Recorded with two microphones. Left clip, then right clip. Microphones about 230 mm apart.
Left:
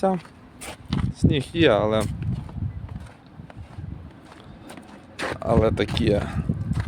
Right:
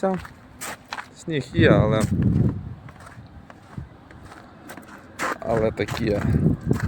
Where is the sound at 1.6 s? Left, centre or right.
Centre.